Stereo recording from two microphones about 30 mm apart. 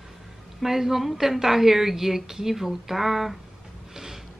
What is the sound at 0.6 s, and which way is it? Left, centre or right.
Speech, centre.